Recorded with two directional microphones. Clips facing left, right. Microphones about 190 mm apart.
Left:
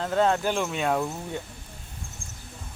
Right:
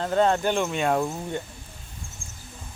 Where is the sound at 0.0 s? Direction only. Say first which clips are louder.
Right 2 dB; centre (ahead or behind).